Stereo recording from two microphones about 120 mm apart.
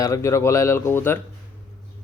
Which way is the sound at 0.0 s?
25° left (ahead or behind).